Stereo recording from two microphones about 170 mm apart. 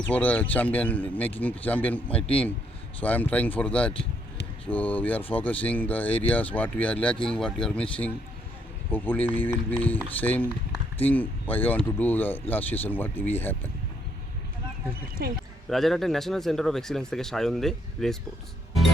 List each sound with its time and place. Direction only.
0.1 s speech: 10° left (ahead or behind)
15.2 s speech: 65° right (ahead or behind)
15.7 s speech: centre (ahead or behind)